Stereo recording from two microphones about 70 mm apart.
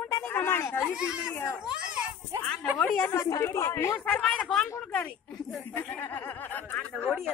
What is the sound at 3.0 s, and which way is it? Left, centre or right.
Speech, left.